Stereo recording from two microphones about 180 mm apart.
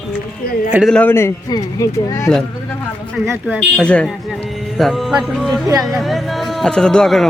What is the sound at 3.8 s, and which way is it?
Speech, 5° left (ahead or behind).